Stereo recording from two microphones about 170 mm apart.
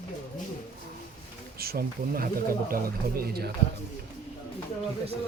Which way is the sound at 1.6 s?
65° right (ahead or behind).